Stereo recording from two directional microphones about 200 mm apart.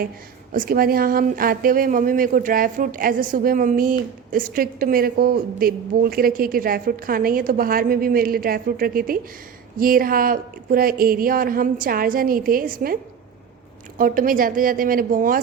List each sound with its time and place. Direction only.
0.5 s speech: 45° right (ahead or behind)
14.0 s speech: 45° right (ahead or behind)